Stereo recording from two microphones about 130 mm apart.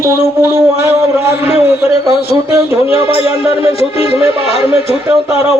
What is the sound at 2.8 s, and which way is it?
Speech, 50° left (ahead or behind).